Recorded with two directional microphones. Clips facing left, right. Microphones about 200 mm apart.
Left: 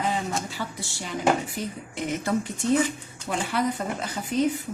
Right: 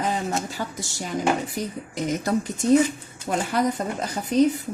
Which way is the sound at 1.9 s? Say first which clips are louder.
Right 2 dB; 40° right (ahead or behind).